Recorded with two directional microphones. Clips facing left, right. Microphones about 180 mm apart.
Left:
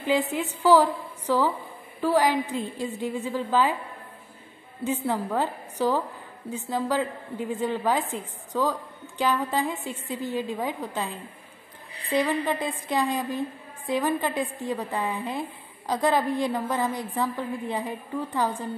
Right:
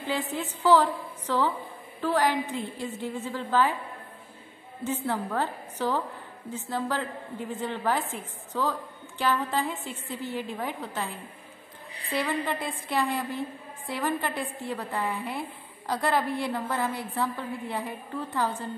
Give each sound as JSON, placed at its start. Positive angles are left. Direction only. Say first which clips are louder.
{"t": 0.0, "sound": "a woman's voice", "louder": "left 6 dB", "side_deg": 15}
{"t": 4.8, "sound": "a woman's voice", "louder": "left 3 dB", "side_deg": 15}